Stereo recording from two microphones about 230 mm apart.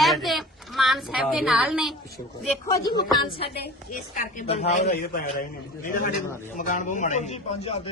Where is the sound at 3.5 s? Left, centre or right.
Left.